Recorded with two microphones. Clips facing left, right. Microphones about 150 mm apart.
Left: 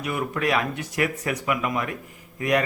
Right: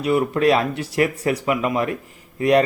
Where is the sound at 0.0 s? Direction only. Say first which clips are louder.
Right 8 dB; 30° right (ahead or behind).